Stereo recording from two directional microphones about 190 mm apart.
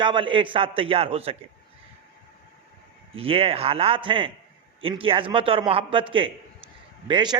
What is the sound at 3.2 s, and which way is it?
A man's voice, 30° right (ahead or behind).